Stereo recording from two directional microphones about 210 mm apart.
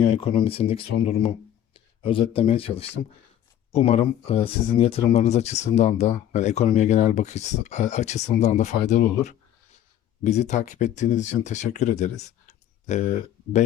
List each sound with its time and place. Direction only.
0.2 s speech: 25° left (ahead or behind)